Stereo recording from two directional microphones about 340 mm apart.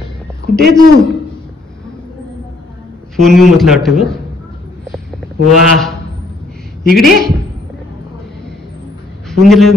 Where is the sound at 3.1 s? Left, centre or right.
Centre.